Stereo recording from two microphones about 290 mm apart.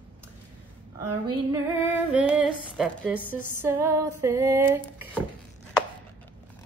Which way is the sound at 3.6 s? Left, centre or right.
Centre.